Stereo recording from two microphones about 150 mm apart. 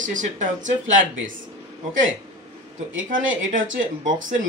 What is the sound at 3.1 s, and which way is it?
Speech, 60° right (ahead or behind).